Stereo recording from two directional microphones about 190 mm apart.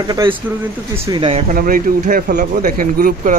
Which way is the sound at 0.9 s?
15° right (ahead or behind).